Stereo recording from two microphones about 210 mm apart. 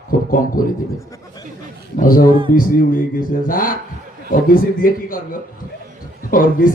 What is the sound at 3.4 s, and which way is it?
Speech, 40° left (ahead or behind).